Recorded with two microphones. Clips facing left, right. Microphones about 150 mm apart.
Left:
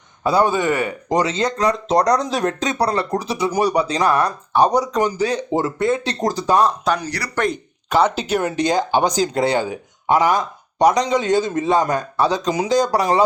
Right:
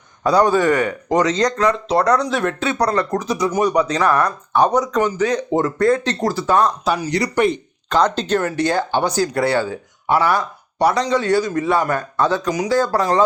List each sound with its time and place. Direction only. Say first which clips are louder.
0.4 s a man's voice: right 3 dB; 25° left (ahead or behind)
1.6 s speech: left 1 dB; 40° left (ahead or behind)
6.0 s speech: right 1 dB; 15° left (ahead or behind)
6.8 s speech: right 2 dB; 5° right (ahead or behind)
7.9 s speech: even; 10° left (ahead or behind)